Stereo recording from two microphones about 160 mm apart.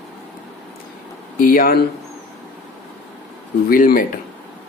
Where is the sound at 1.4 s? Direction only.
65° left (ahead or behind).